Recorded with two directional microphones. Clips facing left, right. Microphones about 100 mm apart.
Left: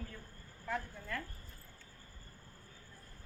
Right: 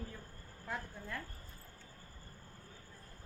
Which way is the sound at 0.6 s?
20° right (ahead or behind).